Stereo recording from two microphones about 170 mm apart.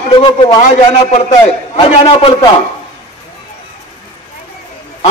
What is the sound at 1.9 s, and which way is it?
Speech, 35° left (ahead or behind).